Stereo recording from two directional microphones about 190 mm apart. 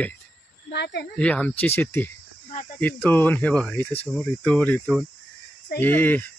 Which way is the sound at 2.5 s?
40° left (ahead or behind).